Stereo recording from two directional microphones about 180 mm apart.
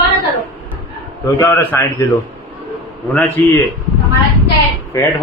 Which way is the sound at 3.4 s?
10° left (ahead or behind).